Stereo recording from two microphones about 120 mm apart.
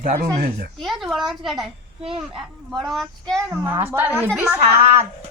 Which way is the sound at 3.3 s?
20° right (ahead or behind).